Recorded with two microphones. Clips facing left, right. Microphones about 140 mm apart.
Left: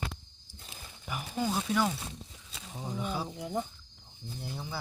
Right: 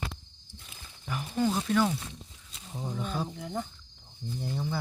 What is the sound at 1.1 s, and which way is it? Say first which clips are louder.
Speech: right 4 dB; 10° left (ahead or behind).